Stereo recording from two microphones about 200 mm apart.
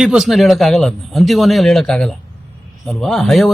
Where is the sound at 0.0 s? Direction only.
Centre (ahead or behind).